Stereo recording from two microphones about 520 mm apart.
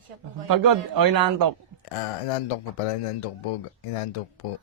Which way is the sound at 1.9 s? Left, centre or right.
Left.